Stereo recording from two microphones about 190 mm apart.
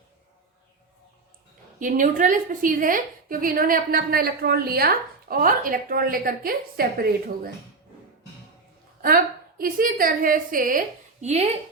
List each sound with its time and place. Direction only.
1.8 s a woman's voice: 45° right (ahead or behind)
9.0 s a woman's voice: 50° right (ahead or behind)